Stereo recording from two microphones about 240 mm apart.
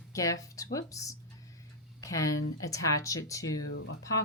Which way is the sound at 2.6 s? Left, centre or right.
Centre.